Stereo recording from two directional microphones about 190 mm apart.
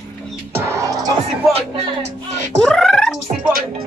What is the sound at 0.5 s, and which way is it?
Music, 15° right (ahead or behind).